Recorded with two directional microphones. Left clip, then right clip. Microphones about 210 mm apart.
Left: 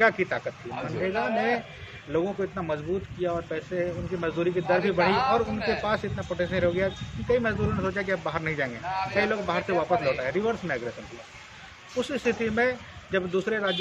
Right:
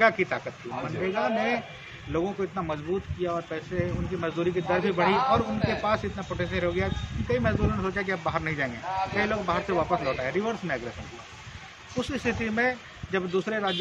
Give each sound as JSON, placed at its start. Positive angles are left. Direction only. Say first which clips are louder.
{"t": 0.0, "sound": "a man's voice", "louder": "even", "side_deg": 0}
{"t": 12.0, "sound": "a man's voice", "louder": "left 3 dB", "side_deg": 0}